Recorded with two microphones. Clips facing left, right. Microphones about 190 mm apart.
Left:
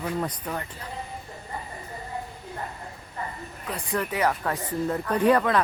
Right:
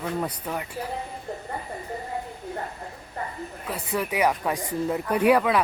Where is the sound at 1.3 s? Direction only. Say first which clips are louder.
Right 8 dB; 60° right (ahead or behind).